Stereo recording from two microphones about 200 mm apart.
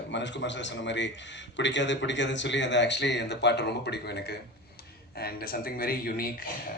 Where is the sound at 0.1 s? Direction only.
65° left (ahead or behind).